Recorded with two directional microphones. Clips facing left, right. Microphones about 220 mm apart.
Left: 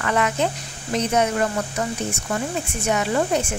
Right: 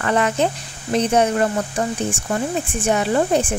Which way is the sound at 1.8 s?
30° right (ahead or behind).